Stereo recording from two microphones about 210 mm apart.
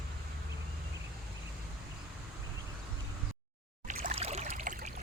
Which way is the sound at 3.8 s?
40° right (ahead or behind).